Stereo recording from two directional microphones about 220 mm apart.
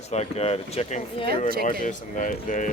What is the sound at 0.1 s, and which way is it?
Speech, 30° left (ahead or behind).